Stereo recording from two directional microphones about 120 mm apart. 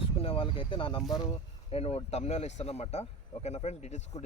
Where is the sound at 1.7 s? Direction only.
55° left (ahead or behind).